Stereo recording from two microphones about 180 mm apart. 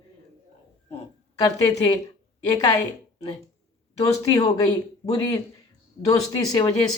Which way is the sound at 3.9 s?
20° left (ahead or behind).